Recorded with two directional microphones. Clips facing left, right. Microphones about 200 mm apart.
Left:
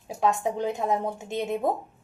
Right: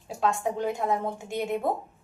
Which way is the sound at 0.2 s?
20° left (ahead or behind).